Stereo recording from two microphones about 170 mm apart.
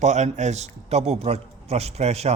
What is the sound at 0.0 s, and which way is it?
A man's voice, 45° right (ahead or behind).